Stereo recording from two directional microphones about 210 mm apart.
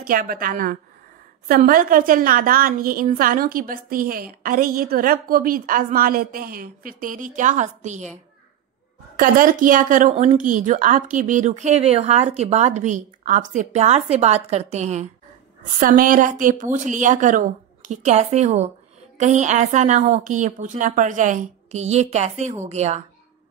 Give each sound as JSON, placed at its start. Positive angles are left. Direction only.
{"t": 0.0, "sound": "a woman's voice", "side_deg": -45}